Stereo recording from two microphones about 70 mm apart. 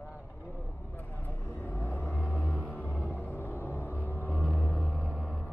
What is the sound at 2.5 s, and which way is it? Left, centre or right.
Music, left.